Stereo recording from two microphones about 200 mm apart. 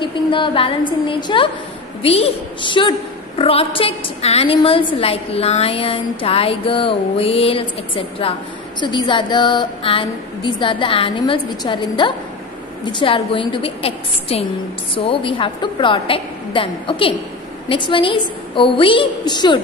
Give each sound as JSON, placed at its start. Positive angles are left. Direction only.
{"t": 0.0, "sound": "a woman's voice", "side_deg": 25}